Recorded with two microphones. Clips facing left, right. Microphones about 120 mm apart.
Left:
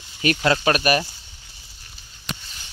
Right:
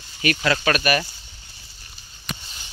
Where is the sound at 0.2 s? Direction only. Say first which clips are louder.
Left 2 dB; 30° left (ahead or behind).